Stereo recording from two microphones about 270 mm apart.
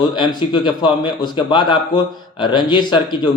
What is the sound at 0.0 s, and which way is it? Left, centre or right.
A man's voice, centre.